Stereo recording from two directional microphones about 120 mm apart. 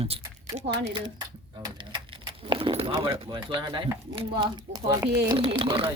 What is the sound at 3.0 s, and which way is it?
Speech, 25° right (ahead or behind).